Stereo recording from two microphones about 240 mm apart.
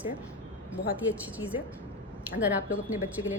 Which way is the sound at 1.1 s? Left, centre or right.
Centre.